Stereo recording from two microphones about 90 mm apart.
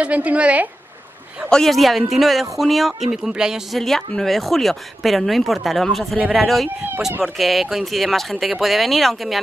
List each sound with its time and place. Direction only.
0.0 s a woman's voice: 15° right (ahead or behind)
1.5 s speech: 5° left (ahead or behind)